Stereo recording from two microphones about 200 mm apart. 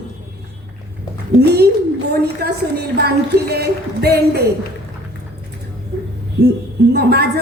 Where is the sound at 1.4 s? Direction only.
55° right (ahead or behind).